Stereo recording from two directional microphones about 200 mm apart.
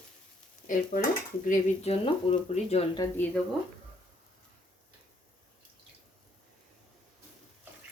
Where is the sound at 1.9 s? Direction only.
30° left (ahead or behind).